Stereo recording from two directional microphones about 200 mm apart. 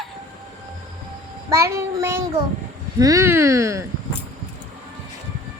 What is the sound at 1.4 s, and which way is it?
Speech, 15° right (ahead or behind).